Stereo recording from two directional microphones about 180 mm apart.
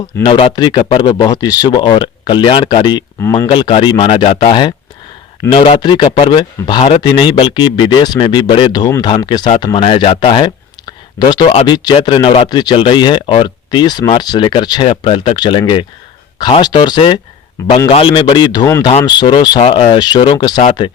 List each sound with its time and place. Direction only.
0.2 s speech: 30° left (ahead or behind)